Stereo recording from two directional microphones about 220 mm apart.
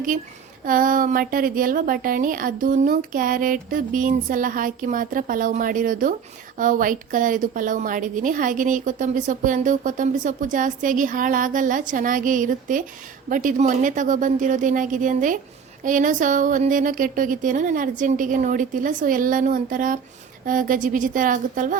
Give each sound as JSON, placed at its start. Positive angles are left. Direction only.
{"t": 0.6, "sound": "a woman's voice", "side_deg": -40}